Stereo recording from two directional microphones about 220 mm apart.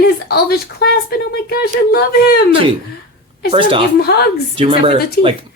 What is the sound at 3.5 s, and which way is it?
Speech, 25° right (ahead or behind).